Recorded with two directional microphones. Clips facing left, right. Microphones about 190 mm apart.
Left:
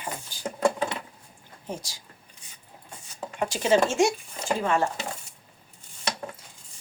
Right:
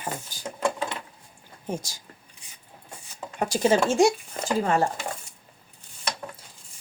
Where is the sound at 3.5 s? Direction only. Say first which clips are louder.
Right 1 dB; 40° right (ahead or behind).